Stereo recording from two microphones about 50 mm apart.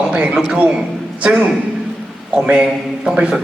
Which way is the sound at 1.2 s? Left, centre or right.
Right.